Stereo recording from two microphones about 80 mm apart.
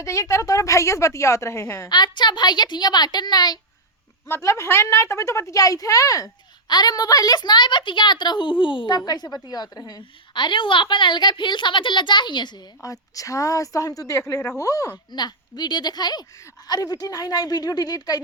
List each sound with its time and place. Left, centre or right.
0.0 s a woman's voice: left
1.9 s a woman's voice: left
4.4 s a woman's voice: left
6.7 s a woman's voice: left
9.0 s a woman's voice: left
12.8 s a woman's voice: left
15.1 s a woman's voice: left